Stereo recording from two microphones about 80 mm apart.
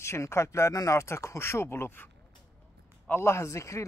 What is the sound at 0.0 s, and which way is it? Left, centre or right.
A man's voice, left.